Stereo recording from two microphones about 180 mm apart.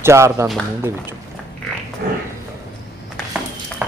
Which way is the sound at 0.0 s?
15° right (ahead or behind).